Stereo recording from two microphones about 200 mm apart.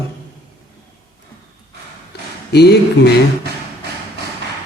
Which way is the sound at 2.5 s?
55° left (ahead or behind).